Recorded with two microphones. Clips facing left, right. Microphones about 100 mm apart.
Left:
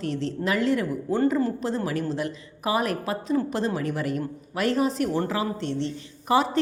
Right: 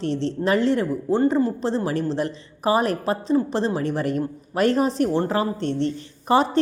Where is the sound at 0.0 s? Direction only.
35° right (ahead or behind).